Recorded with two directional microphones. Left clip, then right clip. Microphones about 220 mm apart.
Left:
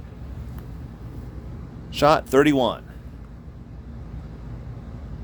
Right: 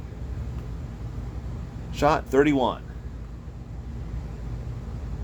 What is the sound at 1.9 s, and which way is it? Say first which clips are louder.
Speech: left 4 dB; 45° left (ahead or behind).